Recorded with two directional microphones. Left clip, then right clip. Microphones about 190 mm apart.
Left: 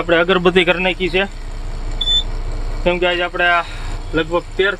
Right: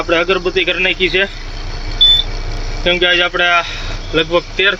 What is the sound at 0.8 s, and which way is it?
Speech, 15° left (ahead or behind).